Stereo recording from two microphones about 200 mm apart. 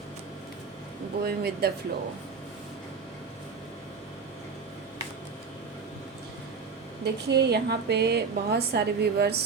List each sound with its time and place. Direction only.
1.2 s speech: 55° right (ahead or behind)
7.0 s a woman's voice: 55° right (ahead or behind)